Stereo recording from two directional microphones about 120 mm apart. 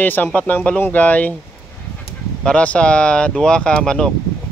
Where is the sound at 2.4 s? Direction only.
10° left (ahead or behind).